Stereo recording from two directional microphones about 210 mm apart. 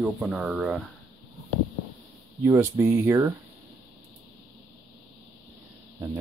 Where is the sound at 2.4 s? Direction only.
10° right (ahead or behind).